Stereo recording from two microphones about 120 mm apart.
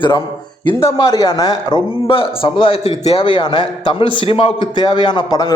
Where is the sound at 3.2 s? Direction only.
40° left (ahead or behind).